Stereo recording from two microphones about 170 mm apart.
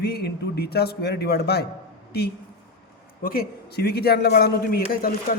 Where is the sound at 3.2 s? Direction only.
65° left (ahead or behind).